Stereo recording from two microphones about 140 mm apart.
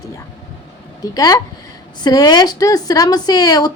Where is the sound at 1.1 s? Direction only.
25° left (ahead or behind).